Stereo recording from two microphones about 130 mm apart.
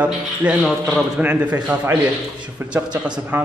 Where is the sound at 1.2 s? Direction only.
10° right (ahead or behind).